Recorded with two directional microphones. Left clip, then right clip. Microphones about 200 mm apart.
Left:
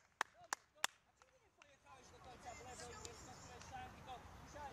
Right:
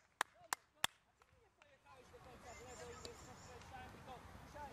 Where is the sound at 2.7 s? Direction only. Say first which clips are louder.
Right 1 dB; 45° left (ahead or behind).